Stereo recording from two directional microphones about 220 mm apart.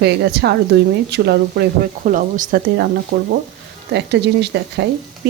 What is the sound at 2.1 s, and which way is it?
Speech, 35° right (ahead or behind).